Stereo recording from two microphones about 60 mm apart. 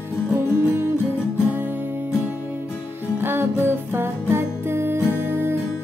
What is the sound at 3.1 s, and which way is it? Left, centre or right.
Music, right.